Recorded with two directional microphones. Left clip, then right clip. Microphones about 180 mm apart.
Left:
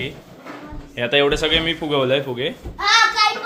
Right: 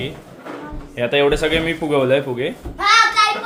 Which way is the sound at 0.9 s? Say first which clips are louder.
Right 1 dB; centre (ahead or behind).